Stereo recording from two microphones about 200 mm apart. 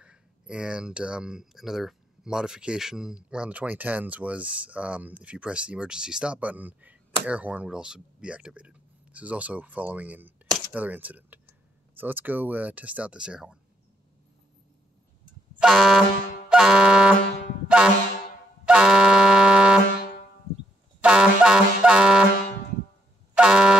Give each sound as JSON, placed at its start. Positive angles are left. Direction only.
{"t": 0.0, "sound": "speech", "side_deg": -5}
{"t": 15.6, "sound": "music", "side_deg": 0}
{"t": 17.7, "sound": "speech", "side_deg": -5}
{"t": 18.7, "sound": "music", "side_deg": -5}
{"t": 19.9, "sound": "a sound", "side_deg": 45}
{"t": 20.5, "sound": "a sound", "side_deg": 90}
{"t": 21.0, "sound": "music", "side_deg": -5}
{"t": 23.3, "sound": "music", "side_deg": -5}